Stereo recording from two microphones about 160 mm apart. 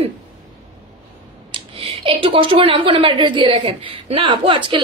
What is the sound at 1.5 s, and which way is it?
A woman's voice, 35° right (ahead or behind).